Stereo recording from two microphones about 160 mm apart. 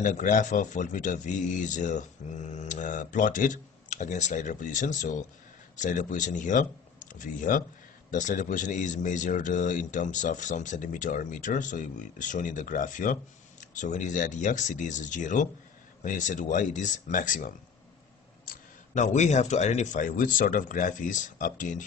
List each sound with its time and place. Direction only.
0.0 s a man's voice: 55° left (ahead or behind)